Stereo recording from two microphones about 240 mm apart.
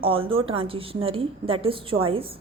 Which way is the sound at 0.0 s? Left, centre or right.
Right.